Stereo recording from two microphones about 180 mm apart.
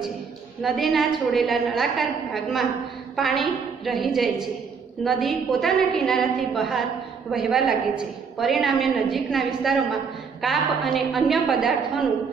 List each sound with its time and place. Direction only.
0.6 s a woman's voice: centre (ahead or behind)